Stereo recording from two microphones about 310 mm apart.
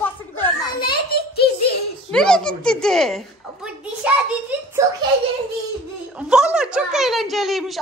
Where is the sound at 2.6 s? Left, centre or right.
Centre.